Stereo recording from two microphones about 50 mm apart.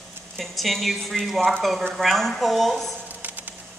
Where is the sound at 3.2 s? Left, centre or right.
Right.